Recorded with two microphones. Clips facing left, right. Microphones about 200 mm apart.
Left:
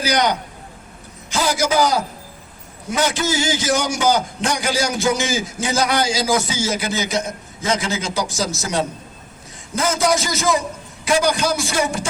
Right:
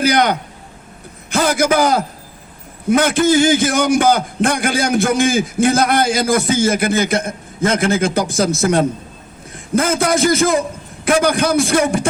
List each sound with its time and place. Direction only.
0.0 s a man's voice: 55° right (ahead or behind)